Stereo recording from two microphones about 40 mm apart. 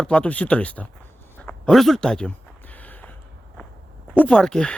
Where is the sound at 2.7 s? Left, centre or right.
Left.